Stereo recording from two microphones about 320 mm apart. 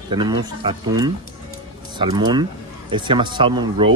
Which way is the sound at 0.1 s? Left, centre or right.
Centre.